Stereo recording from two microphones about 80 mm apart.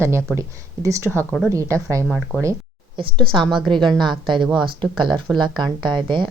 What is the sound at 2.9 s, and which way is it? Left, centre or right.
Speech, right.